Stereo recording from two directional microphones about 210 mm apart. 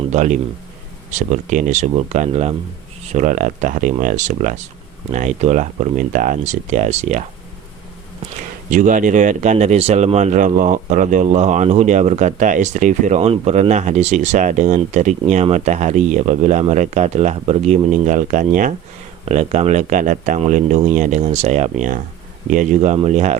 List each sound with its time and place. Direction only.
0.1 s a man's voice: 35° right (ahead or behind)
8.7 s speech: 35° right (ahead or behind)